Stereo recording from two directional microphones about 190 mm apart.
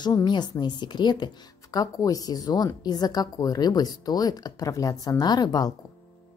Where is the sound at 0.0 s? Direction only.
20° left (ahead or behind).